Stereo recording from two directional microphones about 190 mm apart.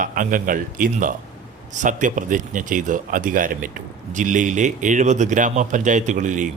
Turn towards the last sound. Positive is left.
turn(degrees=-40)  # may be behind; listen again after turning